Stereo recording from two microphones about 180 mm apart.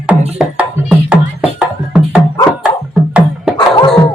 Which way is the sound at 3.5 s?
25° left (ahead or behind).